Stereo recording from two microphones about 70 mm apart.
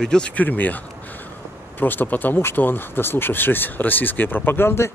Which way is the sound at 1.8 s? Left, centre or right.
Left.